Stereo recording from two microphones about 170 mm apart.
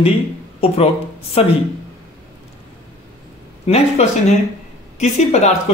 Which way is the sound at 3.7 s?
40° left (ahead or behind).